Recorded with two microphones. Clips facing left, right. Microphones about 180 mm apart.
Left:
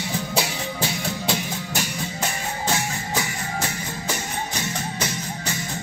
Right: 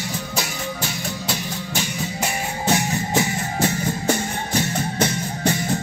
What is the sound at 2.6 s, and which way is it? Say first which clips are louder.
Music: right 6 dB; 20° right (ahead or behind).